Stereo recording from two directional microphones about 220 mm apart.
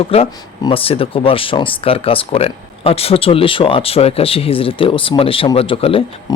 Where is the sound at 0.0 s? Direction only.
25° left (ahead or behind).